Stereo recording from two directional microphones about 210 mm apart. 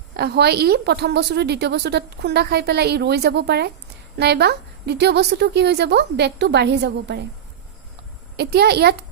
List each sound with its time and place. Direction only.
0.2 s a woman's voice: 50° right (ahead or behind)
8.4 s a woman's voice: 50° right (ahead or behind)